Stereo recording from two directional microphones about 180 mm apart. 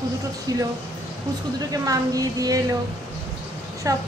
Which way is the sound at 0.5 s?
20° right (ahead or behind).